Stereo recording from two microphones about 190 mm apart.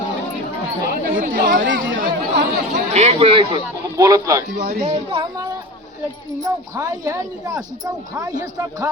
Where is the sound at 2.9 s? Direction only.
30° right (ahead or behind); by 4.4 s 15° right (ahead or behind).